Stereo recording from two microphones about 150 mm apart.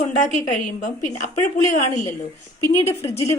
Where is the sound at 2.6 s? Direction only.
15° left (ahead or behind).